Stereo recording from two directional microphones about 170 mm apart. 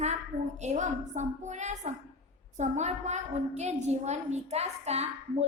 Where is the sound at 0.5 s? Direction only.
45° right (ahead or behind).